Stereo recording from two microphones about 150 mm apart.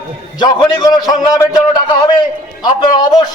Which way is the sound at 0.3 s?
30° left (ahead or behind).